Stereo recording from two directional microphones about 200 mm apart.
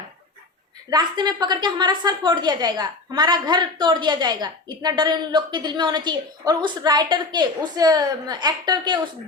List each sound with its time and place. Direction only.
0.9 s a woman's voice: 20° right (ahead or behind)